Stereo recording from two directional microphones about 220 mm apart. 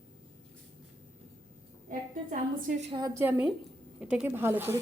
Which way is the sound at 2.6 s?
30° right (ahead or behind).